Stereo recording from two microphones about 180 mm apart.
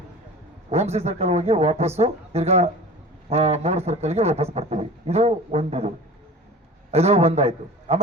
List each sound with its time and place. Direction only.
0.7 s speech: 35° right (ahead or behind)
6.9 s speech: 35° right (ahead or behind)